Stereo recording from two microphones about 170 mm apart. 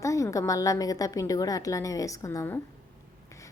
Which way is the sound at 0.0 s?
20° left (ahead or behind).